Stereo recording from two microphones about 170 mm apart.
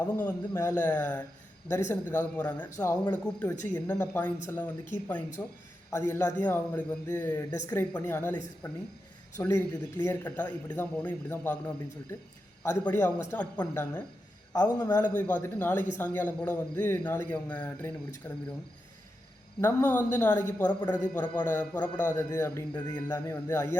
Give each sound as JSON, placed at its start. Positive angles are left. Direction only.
{"t": 0.0, "sound": "a man's voice", "side_deg": 10}
{"t": 12.6, "sound": "a man's voice", "side_deg": 15}
{"t": 19.6, "sound": "a man's voice", "side_deg": 10}